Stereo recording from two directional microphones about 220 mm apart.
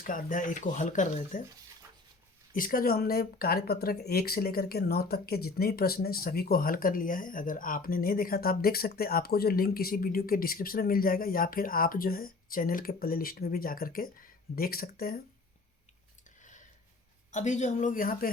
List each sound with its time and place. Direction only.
0.0 s speech: 40° left (ahead or behind)
2.5 s speech: 40° left (ahead or behind)
16.4 s a sound: 35° left (ahead or behind)
17.3 s speech: 35° left (ahead or behind)